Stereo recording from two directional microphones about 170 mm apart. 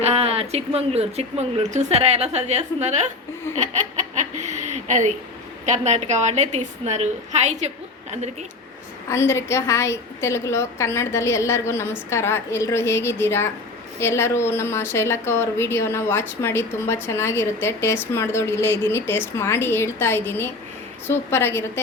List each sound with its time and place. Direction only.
0.0 s speech: 35° right (ahead or behind)
4.2 s a woman's voice: 45° right (ahead or behind)
9.0 s a woman's voice: 15° left (ahead or behind)